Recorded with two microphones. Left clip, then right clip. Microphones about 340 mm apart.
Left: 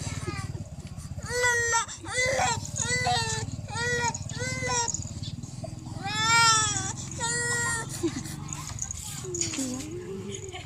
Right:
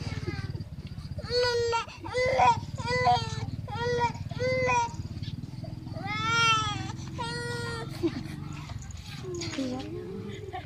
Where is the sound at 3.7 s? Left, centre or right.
Right.